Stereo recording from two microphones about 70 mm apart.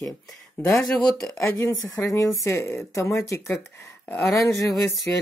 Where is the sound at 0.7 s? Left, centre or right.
Centre.